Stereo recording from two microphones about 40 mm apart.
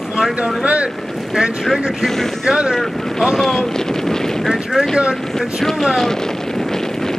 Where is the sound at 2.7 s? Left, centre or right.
Centre.